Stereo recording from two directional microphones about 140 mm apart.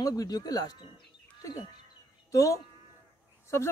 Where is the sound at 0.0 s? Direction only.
25° left (ahead or behind).